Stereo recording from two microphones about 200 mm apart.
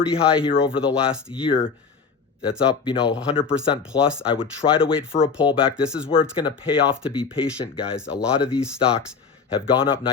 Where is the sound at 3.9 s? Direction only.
20° left (ahead or behind).